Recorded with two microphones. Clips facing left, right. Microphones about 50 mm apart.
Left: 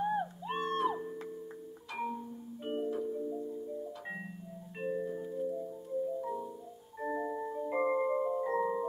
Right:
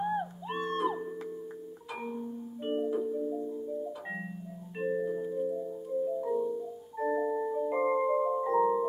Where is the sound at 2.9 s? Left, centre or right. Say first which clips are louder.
Right 4 dB; centre.